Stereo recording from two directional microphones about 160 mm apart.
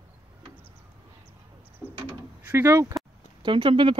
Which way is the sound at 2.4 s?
15° right (ahead or behind).